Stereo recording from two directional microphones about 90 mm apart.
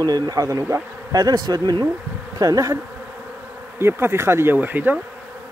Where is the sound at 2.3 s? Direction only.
40° right (ahead or behind).